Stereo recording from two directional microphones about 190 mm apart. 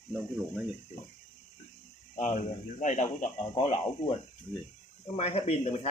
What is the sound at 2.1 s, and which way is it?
Speech, 40° left (ahead or behind).